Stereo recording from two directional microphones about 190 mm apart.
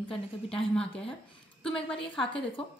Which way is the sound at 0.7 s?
5° left (ahead or behind).